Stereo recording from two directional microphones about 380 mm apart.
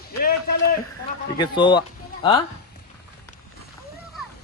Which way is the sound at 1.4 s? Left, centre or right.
Centre.